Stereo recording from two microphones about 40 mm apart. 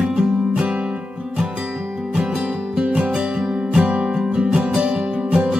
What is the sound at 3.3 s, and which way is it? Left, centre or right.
Music, centre.